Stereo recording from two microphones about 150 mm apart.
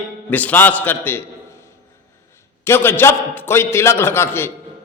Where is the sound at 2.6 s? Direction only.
15° left (ahead or behind).